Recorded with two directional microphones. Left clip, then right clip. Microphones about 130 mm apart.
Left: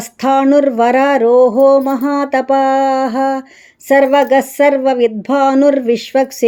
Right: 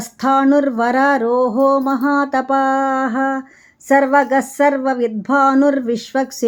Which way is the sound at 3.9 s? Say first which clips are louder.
Left 4 dB; 15° left (ahead or behind).